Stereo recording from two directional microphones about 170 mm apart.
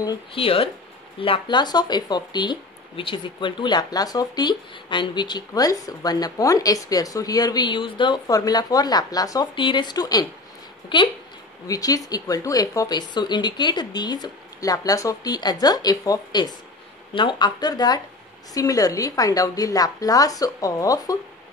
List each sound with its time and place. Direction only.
0.0 s speech: 30° left (ahead or behind)